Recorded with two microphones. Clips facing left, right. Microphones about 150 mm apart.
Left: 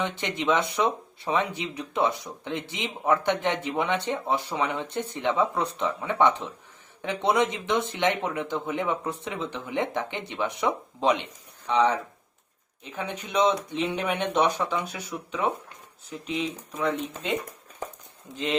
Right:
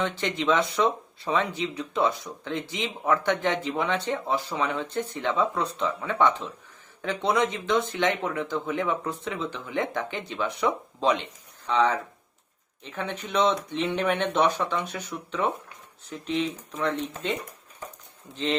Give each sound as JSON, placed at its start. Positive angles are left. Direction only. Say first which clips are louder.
{"t": 0.0, "sound": "speech", "louder": "right 1 dB", "side_deg": 20}